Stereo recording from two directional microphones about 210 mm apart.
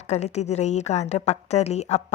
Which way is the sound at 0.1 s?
30° left (ahead or behind).